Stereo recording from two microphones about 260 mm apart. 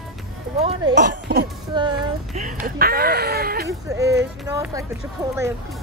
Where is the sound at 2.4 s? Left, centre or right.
Right.